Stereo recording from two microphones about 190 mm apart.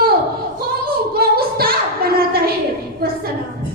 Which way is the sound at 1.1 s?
55° right (ahead or behind).